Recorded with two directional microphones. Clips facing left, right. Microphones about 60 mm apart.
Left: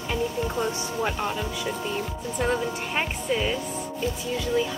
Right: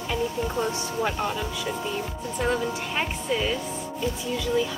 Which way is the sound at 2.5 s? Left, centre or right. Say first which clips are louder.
Right 1 dB; centre.